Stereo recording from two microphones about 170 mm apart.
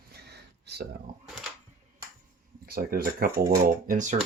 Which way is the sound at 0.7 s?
75° right (ahead or behind).